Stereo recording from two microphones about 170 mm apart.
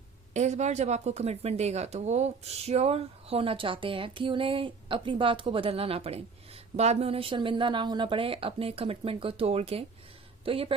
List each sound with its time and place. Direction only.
0.3 s speech: 40° right (ahead or behind)